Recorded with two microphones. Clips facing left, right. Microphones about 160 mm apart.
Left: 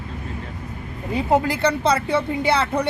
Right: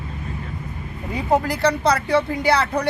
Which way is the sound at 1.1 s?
25° left (ahead or behind).